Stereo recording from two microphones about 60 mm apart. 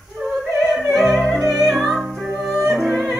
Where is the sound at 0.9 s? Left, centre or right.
Centre.